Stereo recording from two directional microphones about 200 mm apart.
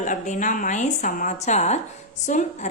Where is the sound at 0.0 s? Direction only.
40° left (ahead or behind).